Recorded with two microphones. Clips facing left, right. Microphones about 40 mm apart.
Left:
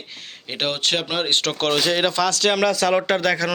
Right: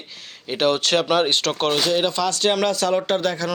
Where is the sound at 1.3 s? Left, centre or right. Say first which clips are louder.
Even; left.